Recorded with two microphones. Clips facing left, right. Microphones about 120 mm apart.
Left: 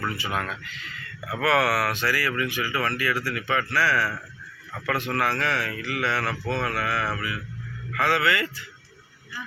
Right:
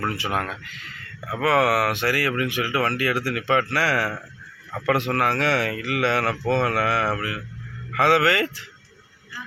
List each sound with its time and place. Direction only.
0.0 s speech: 60° right (ahead or behind)
0.3 s speech: 45° right (ahead or behind); by 8.6 s 75° right (ahead or behind)